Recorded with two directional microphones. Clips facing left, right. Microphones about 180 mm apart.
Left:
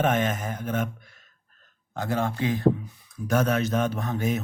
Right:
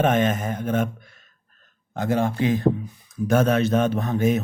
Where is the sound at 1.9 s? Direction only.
20° right (ahead or behind).